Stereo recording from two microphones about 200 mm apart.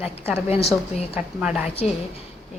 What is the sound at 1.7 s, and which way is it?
Speech, 30° left (ahead or behind).